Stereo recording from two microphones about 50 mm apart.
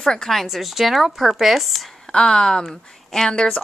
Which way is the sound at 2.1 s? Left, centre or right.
Centre.